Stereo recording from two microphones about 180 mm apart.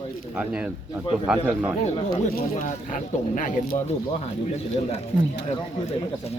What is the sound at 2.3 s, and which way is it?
Speech, 45° left (ahead or behind).